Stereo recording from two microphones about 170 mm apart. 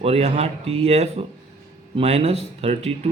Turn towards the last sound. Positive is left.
turn(degrees=-40)  # may be behind; listen again after turning